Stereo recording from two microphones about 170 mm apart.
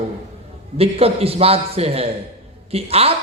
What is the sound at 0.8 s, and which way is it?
A man's voice, 35° right (ahead or behind).